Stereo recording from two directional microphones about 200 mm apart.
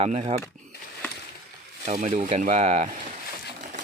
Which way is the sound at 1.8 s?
35° right (ahead or behind).